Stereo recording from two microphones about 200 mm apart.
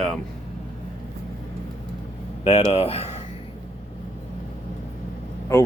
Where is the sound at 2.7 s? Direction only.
30° left (ahead or behind).